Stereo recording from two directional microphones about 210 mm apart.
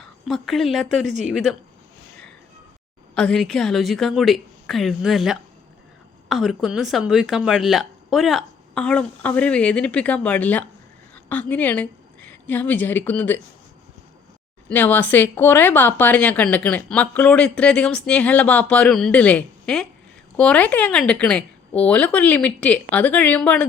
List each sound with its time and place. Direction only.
0.0 s speech: centre (ahead or behind)
3.2 s a woman's voice: 5° left (ahead or behind)
14.7 s speech: 10° left (ahead or behind)